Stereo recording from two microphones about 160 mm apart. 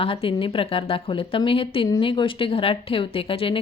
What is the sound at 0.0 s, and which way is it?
Speech, 35° left (ahead or behind).